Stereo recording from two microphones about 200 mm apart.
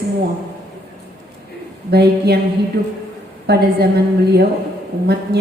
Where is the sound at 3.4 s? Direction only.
55° right (ahead or behind).